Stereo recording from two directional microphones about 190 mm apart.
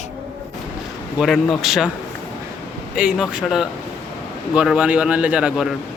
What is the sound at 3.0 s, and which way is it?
Speech, 5° right (ahead or behind).